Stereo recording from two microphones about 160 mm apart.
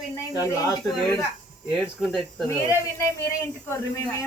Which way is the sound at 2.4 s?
15° left (ahead or behind).